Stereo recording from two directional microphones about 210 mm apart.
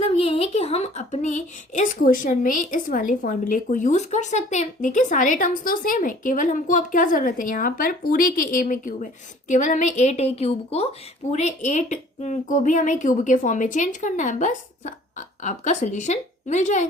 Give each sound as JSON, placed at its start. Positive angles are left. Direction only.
{"t": 0.0, "sound": "a woman's voice", "side_deg": 25}